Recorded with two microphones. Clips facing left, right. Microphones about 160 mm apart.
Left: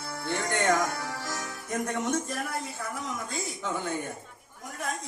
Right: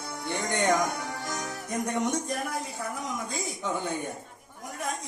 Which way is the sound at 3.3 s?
15° right (ahead or behind).